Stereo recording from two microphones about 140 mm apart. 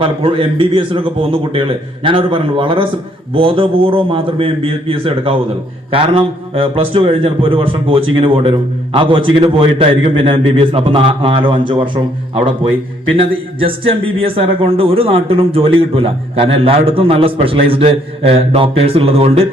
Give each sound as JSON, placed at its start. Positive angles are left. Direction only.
{"t": 0.0, "sound": "a man's voice", "side_deg": -40}